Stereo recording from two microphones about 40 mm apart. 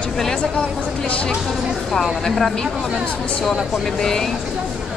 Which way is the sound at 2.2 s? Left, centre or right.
Centre.